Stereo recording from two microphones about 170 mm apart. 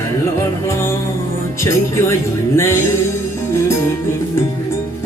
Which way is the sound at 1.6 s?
15° left (ahead or behind).